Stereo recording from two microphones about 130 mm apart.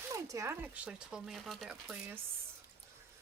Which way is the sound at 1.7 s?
10° right (ahead or behind).